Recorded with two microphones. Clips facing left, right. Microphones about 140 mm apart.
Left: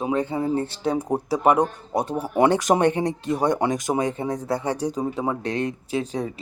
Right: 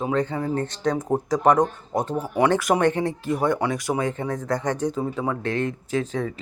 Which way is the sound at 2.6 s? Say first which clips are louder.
Left 1 dB; 20° left (ahead or behind).